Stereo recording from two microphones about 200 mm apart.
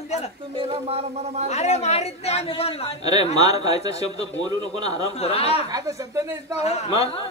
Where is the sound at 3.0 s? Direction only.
20° right (ahead or behind).